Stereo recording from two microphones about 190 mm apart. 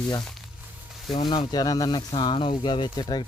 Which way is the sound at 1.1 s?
25° left (ahead or behind).